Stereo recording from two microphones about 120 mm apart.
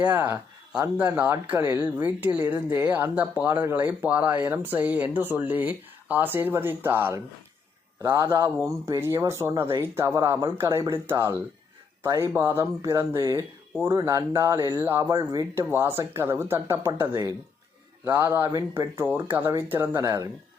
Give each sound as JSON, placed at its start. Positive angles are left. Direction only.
{"t": 0.0, "sound": "speech", "side_deg": -10}
{"t": 15.3, "sound": "speech", "side_deg": -30}